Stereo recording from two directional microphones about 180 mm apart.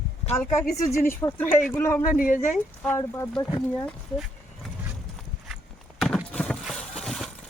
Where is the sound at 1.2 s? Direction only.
15° left (ahead or behind).